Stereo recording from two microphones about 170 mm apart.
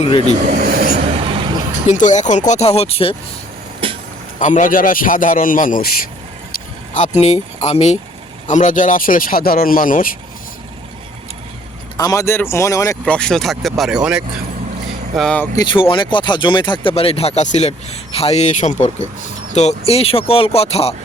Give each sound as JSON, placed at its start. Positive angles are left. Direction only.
{"t": 0.0, "sound": "speech", "side_deg": 30}
{"t": 0.3, "sound": "speech", "side_deg": -60}
{"t": 0.9, "sound": "a sound", "side_deg": -35}
{"t": 1.9, "sound": "a man's voice", "side_deg": 45}
{"t": 4.4, "sound": "a man's voice", "side_deg": 50}
{"t": 6.9, "sound": "speech", "side_deg": 45}
{"t": 11.9, "sound": "speech", "side_deg": 20}
{"t": 13.1, "sound": "speech", "side_deg": 5}
{"t": 15.5, "sound": "a man's voice", "side_deg": 30}